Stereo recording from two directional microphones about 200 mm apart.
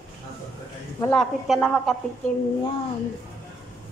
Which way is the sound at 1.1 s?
Centre (ahead or behind).